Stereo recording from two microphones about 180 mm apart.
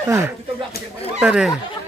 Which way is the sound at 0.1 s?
15° right (ahead or behind).